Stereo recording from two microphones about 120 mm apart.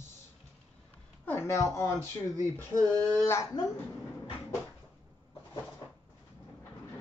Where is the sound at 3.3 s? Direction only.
25° left (ahead or behind).